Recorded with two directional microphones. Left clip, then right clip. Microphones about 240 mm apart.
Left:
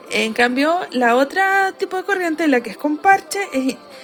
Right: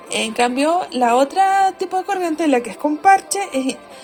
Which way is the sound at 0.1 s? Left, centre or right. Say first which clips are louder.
Left 1 dB; left.